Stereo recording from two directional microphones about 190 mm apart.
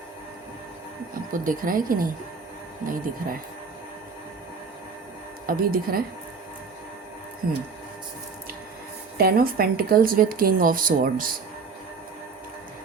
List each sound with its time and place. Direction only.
1.3 s speech: 45° right (ahead or behind)
5.5 s speech: 50° right (ahead or behind)
7.4 s speech: 50° right (ahead or behind)
9.1 s speech: 50° right (ahead or behind)